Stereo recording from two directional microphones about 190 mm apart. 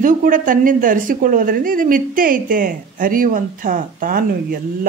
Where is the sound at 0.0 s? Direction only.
45° right (ahead or behind).